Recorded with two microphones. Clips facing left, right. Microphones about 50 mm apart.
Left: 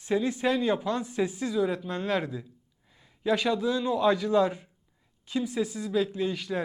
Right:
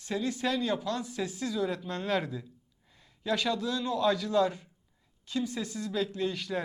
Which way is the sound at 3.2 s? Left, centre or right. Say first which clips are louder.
Left 4 dB; centre.